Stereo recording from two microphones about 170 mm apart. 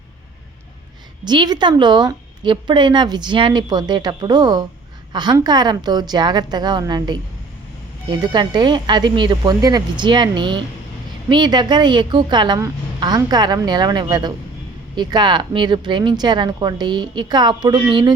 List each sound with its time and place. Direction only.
1.2 s a woman's voice: 25° right (ahead or behind)